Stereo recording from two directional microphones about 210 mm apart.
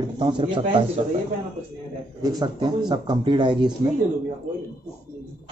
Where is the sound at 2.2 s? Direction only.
20° right (ahead or behind).